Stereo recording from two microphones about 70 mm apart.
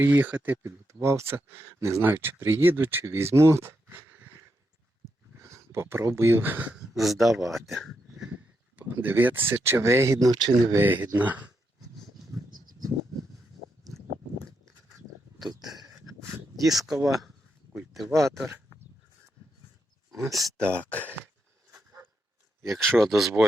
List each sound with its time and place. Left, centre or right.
0.0 s speech: right
0.9 s speech: right
5.7 s speech: right
6.7 s a man's voice: centre
8.7 s speech: right
10.2 s speech: right
10.8 s speech: right
15.4 s a sound: centre
18.2 s a man's voice: centre
20.1 s a man's voice: centre
20.9 s speech: left
22.6 s a man's voice: centre